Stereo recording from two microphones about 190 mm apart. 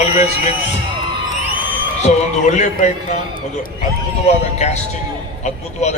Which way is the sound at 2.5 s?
40° left (ahead or behind).